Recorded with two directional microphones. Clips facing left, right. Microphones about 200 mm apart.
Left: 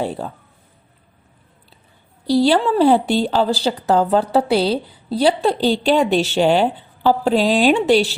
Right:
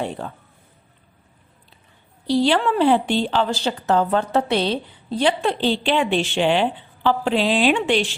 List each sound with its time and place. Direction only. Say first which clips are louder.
0.0 s a woman's voice: left 3 dB; 35° left (ahead or behind)
2.2 s a woman's voice: left 3 dB; 40° left (ahead or behind)